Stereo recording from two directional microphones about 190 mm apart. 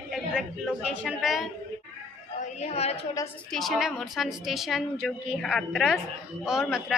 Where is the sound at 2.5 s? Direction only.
35° left (ahead or behind).